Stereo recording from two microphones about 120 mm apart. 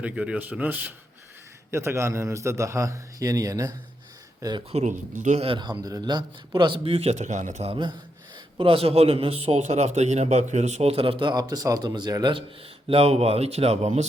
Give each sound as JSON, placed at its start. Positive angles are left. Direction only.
{"t": 0.0, "sound": "a man's voice", "side_deg": -10}
{"t": 4.7, "sound": "speech", "side_deg": -80}
{"t": 5.5, "sound": "a man's voice", "side_deg": -40}
{"t": 7.7, "sound": "a man's voice", "side_deg": -40}
{"t": 12.9, "sound": "speech", "side_deg": -55}